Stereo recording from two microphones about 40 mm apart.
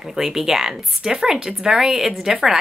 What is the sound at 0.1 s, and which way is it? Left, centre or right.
Speech, centre.